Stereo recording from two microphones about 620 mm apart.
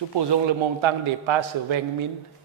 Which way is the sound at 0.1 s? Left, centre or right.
Right.